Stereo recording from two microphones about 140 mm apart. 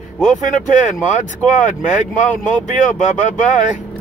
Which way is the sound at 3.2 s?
60° left (ahead or behind).